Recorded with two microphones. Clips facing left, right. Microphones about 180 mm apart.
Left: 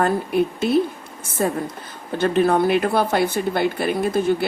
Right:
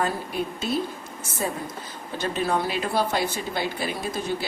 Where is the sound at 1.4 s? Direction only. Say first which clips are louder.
Left 7 dB; 60° left (ahead or behind).